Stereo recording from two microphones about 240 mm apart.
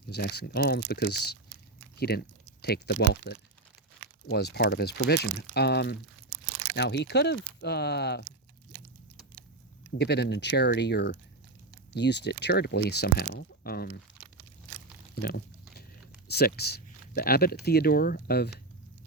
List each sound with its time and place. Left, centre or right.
0.1 s speech: left
10.0 s speech: left
15.1 s a sound: left
16.3 s speech: left